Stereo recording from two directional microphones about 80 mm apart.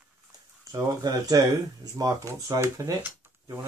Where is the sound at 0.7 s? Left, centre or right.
Right.